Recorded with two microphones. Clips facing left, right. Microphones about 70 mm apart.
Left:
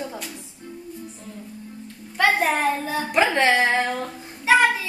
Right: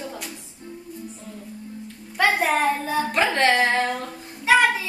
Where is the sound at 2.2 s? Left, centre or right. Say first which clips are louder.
Left 1 dB; centre.